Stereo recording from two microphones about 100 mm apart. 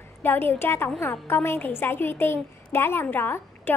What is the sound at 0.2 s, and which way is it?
A woman's voice, 20° left (ahead or behind).